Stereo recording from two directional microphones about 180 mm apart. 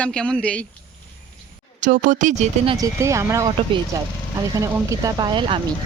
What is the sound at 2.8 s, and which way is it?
Speech, 15° right (ahead or behind).